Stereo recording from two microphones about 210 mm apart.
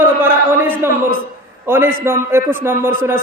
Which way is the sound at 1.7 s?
10° right (ahead or behind).